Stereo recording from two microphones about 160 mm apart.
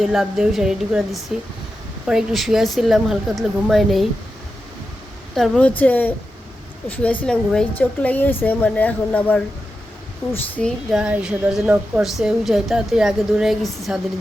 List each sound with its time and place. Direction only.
0.0 s a woman's voice: centre (ahead or behind)
5.3 s a woman's voice: 5° left (ahead or behind)
11.0 s a woman's voice: 5° right (ahead or behind)